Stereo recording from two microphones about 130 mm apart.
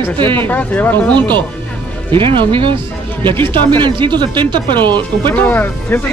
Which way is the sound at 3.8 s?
35° right (ahead or behind).